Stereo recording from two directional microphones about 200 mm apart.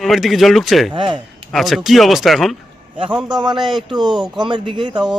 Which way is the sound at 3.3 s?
20° right (ahead or behind).